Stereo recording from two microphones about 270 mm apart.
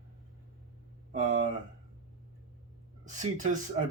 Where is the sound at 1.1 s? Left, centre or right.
Right.